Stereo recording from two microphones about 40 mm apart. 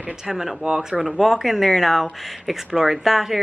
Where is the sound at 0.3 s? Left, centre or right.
Centre.